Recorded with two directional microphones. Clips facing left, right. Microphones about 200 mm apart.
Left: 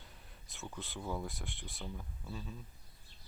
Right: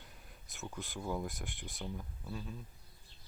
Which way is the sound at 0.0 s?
Centre (ahead or behind).